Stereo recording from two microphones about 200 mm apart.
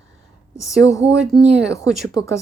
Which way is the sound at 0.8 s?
15° left (ahead or behind).